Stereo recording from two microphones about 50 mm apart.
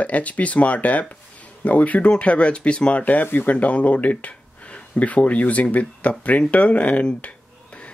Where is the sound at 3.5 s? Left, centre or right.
Left.